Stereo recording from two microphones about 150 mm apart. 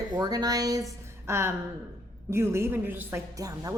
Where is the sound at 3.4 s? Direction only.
25° right (ahead or behind).